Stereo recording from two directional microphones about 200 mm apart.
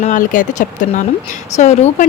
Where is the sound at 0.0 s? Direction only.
40° left (ahead or behind).